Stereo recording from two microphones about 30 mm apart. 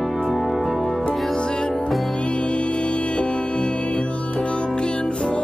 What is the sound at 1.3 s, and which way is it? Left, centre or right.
Music, left.